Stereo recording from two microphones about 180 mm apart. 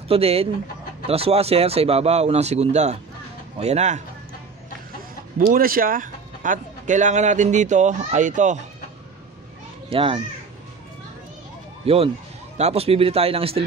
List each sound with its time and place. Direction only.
0.1 s speech: 35° right (ahead or behind)
5.5 s speech: 55° right (ahead or behind)
9.8 s a child's voice: 30° right (ahead or behind)
11.8 s speech: 30° right (ahead or behind)